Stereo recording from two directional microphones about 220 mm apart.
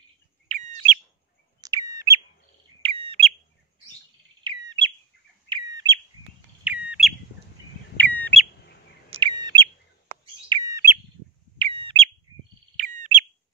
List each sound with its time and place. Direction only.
0.5 s bird: 30° right (ahead or behind)
1.6 s chirp: 15° right (ahead or behind)
2.8 s bird: 25° right (ahead or behind)
4.4 s bird: 20° right (ahead or behind)
6.6 s bird: 5° right (ahead or behind)
8.0 s bird: 5° left (ahead or behind)
9.1 s bird: 20° right (ahead or behind)